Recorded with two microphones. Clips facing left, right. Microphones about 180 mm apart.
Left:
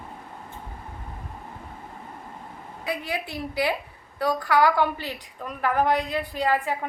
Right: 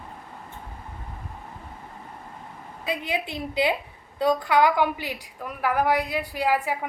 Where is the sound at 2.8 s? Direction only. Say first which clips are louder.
Right 2 dB; 20° right (ahead or behind).